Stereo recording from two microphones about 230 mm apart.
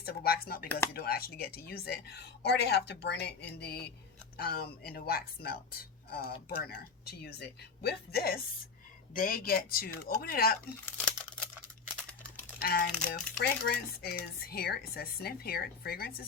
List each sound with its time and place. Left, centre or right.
0.0 s speech: left
10.8 s crumpling: centre
12.5 s speech: left